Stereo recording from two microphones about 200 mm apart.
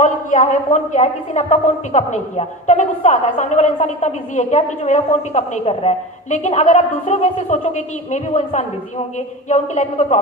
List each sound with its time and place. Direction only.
0.0 s a woman's voice: 35° left (ahead or behind)